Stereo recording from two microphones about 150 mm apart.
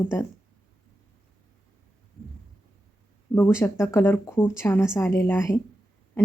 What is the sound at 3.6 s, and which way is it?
Speech, 20° left (ahead or behind).